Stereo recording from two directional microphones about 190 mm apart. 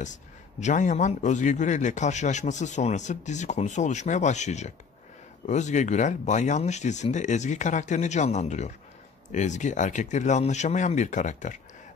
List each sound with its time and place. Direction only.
0.0 s a man's voice: 40° left (ahead or behind)